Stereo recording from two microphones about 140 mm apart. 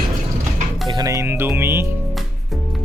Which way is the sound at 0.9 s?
25° right (ahead or behind).